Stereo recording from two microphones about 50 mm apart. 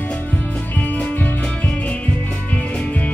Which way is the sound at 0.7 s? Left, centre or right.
Left.